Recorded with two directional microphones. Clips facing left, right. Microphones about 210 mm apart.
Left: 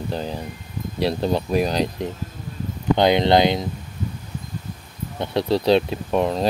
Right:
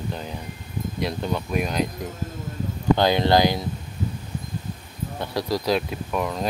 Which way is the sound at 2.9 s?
20° left (ahead or behind).